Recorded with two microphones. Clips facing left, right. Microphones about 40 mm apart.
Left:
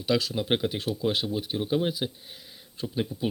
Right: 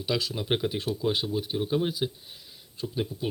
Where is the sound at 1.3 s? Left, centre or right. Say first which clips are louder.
Even; left.